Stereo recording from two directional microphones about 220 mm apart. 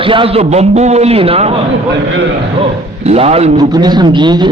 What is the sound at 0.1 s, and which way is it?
A man's voice, 25° right (ahead or behind).